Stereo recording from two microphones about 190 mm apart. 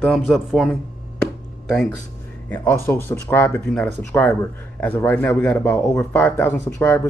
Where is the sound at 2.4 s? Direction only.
10° left (ahead or behind).